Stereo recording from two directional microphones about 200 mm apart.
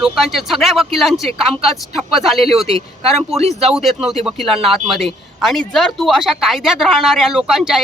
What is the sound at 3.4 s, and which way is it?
Speech, 30° right (ahead or behind).